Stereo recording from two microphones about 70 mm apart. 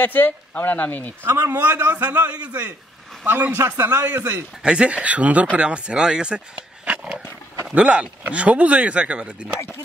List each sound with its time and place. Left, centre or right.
0.0 s speech: left
1.5 s a man's voice: right
3.5 s a man's voice: right
3.8 s a man's voice: right
4.6 s a man's voice: centre
7.7 s speech: centre